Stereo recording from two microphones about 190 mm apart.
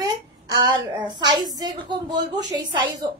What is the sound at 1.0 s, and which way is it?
A woman's voice, 20° right (ahead or behind).